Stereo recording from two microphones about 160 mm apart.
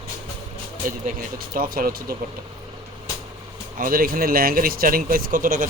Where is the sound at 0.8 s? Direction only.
60° right (ahead or behind).